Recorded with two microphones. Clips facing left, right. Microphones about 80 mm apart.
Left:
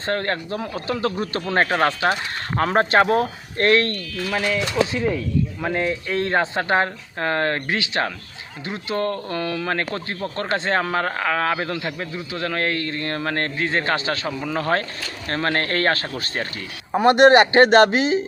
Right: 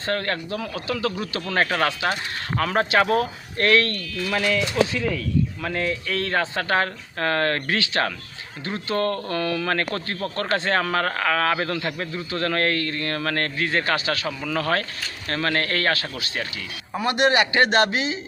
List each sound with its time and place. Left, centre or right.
0.0 s speech: left
4.1 s speech: centre
4.9 s speech: left